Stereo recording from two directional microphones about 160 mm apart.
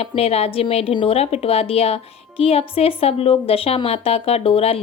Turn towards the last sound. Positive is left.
turn(degrees=40)  # may be behind; listen again after turning